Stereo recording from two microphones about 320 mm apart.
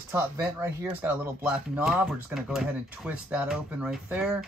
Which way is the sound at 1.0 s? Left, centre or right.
Centre.